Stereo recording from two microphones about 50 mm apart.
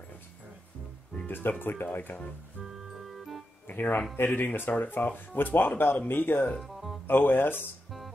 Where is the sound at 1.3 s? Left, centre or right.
Left.